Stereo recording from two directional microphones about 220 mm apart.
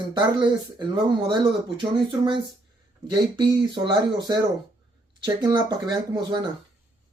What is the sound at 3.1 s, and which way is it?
Speech, 20° right (ahead or behind).